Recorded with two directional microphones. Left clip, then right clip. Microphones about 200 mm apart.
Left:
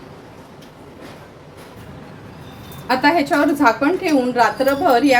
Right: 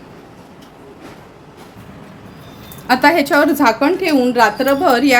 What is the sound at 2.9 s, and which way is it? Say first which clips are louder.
A woman's voice: right 4 dB; 60° right (ahead or behind).